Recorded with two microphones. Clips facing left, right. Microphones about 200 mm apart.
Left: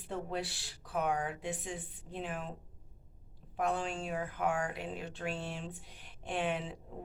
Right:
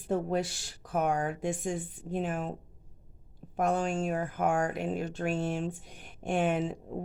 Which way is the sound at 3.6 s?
45° right (ahead or behind).